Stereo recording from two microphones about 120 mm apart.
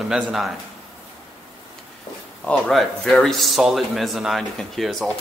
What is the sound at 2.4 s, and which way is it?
A man's voice, 5° left (ahead or behind).